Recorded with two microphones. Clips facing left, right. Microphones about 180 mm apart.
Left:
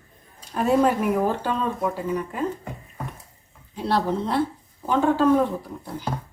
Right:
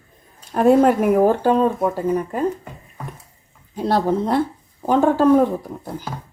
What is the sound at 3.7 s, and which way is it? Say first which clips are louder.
Speech: right 5 dB; 45° right (ahead or behind).